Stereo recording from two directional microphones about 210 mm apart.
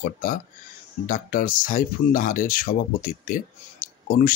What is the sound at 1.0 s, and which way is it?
Speech, 40° left (ahead or behind).